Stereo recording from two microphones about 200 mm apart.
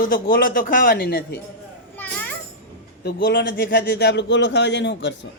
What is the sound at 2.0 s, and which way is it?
Children playing, 10° left (ahead or behind).